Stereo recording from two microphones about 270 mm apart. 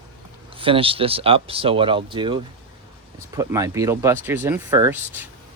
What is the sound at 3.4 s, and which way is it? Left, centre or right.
Speech, centre.